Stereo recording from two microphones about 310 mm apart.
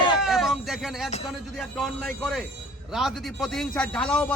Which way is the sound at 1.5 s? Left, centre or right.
Centre.